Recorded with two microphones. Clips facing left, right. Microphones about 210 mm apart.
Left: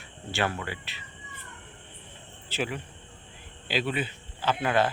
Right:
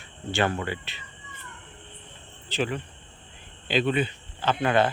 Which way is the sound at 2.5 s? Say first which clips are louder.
Right 3 dB; 10° left (ahead or behind).